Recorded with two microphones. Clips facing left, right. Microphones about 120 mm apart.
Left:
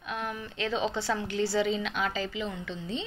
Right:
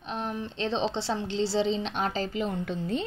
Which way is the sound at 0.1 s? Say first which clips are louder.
Right 2 dB; 35° right (ahead or behind).